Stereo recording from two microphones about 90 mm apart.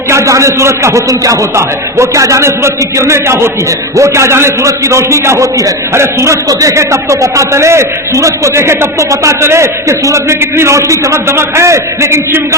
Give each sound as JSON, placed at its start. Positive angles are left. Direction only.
{"t": 0.1, "sound": "a man's voice", "side_deg": -35}